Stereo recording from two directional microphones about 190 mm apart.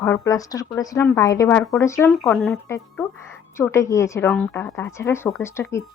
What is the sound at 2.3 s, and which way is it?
Speech, 5° left (ahead or behind).